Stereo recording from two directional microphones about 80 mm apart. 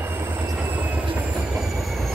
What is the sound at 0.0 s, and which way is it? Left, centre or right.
Train, right.